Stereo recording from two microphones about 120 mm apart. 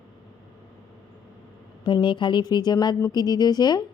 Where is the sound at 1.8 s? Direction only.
40° left (ahead or behind).